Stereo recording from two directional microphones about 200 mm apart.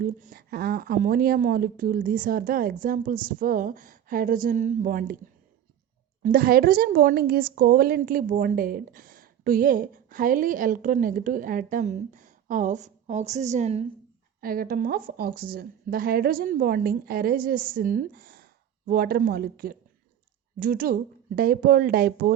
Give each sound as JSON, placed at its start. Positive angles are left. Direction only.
{"t": 0.0, "sound": "a woman's voice", "side_deg": -45}
{"t": 6.2, "sound": "a woman's voice", "side_deg": -45}
{"t": 14.4, "sound": "a woman's voice", "side_deg": -45}